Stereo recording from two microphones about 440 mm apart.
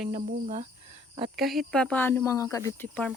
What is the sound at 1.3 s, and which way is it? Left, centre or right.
Speech, centre.